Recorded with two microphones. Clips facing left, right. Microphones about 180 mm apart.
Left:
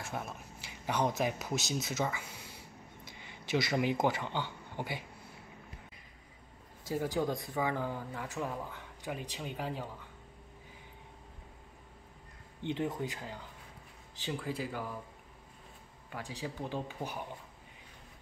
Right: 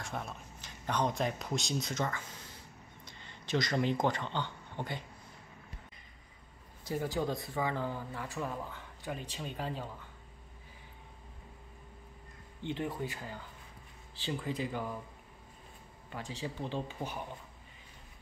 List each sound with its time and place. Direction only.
0.0 s speech: 5° left (ahead or behind)
7.2 s speech: 15° left (ahead or behind)
12.6 s speech: 15° left (ahead or behind)
16.1 s speech: 10° left (ahead or behind)